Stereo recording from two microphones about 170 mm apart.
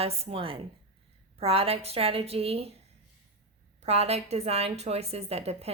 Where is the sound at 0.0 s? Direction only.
35° right (ahead or behind).